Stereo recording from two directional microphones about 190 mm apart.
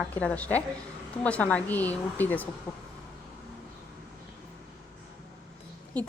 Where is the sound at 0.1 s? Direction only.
5° left (ahead or behind).